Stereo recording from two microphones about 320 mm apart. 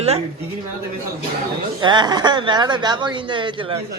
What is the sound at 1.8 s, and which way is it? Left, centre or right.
Speech, centre.